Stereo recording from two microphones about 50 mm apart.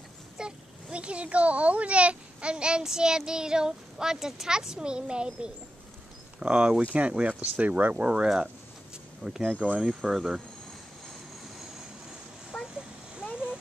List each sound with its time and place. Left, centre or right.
0.4 s a child's voice: centre
9.8 s a child's voice: centre
12.5 s a sound: centre